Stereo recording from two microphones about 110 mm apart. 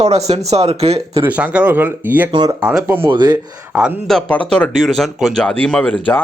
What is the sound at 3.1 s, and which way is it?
Speech, 40° right (ahead or behind).